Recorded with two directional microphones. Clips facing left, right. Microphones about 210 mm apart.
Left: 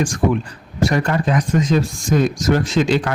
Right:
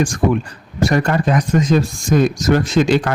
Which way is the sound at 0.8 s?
45° right (ahead or behind).